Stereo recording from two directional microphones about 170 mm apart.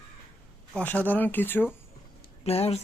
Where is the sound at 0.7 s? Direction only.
10° left (ahead or behind).